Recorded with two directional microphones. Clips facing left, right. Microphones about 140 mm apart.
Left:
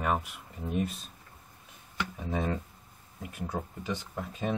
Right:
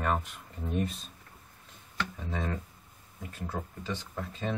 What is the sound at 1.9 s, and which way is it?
Speech, 15° left (ahead or behind).